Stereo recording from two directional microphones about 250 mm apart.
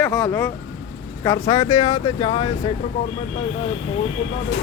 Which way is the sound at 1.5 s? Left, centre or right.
Centre.